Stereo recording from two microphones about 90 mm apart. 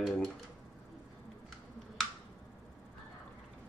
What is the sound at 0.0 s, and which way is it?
Speech, centre (ahead or behind).